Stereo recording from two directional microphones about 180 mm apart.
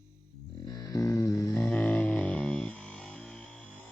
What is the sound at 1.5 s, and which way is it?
Music, 10° left (ahead or behind).